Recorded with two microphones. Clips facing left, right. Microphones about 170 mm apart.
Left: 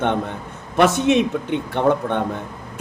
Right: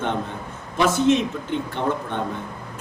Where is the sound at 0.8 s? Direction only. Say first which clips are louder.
Left 3 dB; 70° left (ahead or behind).